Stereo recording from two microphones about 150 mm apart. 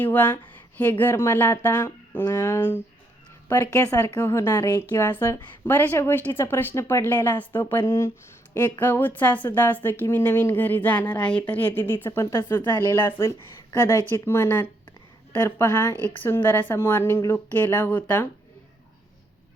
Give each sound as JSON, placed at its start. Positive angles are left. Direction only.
{"t": 0.0, "sound": "a woman's voice", "side_deg": 10}